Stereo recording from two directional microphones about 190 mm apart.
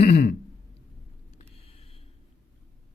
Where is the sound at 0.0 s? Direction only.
35° left (ahead or behind).